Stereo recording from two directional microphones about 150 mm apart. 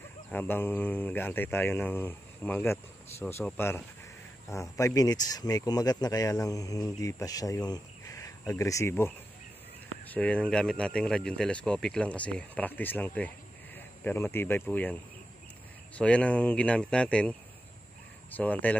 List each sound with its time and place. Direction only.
0.3 s speech: 15° left (ahead or behind)
16.0 s speech: 10° left (ahead or behind)